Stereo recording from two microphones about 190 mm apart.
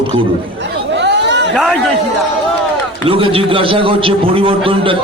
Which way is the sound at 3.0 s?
30° right (ahead or behind).